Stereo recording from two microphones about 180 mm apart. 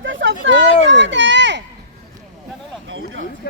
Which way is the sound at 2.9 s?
90° right.